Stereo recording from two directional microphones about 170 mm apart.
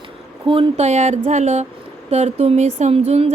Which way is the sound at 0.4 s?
30° right (ahead or behind).